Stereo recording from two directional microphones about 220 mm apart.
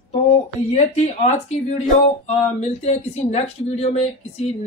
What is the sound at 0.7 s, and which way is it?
Speech, 30° left (ahead or behind).